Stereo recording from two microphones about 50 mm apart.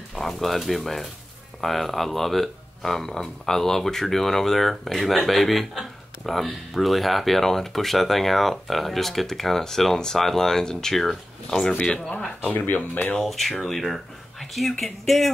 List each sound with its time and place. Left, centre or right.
0.1 s speech: centre
12.4 s speech: left
13.3 s speech: centre